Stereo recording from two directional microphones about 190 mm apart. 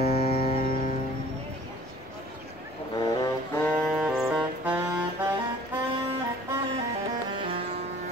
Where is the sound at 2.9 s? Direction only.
20° left (ahead or behind).